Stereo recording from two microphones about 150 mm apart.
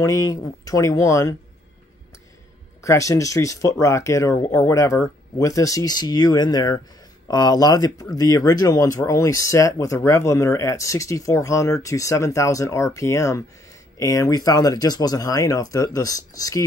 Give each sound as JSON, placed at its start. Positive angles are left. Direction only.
{"t": 0.0, "sound": "speech", "side_deg": 25}
{"t": 2.8, "sound": "speech", "side_deg": 20}